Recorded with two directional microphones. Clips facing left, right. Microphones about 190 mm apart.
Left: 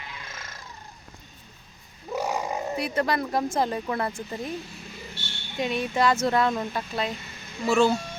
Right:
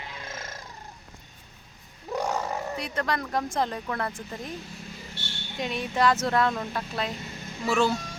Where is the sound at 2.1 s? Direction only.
10° left (ahead or behind).